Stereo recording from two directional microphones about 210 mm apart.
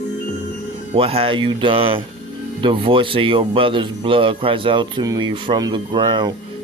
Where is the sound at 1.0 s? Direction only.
25° right (ahead or behind).